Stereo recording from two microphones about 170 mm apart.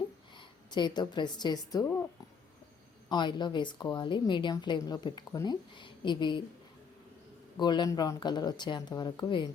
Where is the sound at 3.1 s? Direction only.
25° left (ahead or behind).